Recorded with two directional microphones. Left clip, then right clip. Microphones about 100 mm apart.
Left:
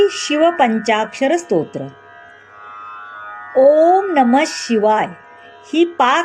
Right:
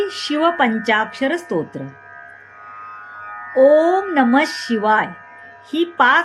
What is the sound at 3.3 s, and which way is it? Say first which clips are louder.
Music: even; 45° left (ahead or behind).